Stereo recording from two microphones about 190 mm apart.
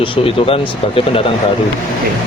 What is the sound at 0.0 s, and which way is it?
Speech, 30° left (ahead or behind).